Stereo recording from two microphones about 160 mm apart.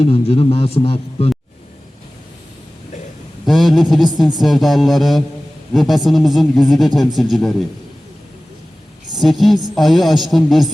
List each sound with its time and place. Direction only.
0.0 s a man's voice: 40° left (ahead or behind)
3.4 s a sound: centre (ahead or behind)
4.4 s a man's voice: centre (ahead or behind)
9.2 s a man's voice: centre (ahead or behind)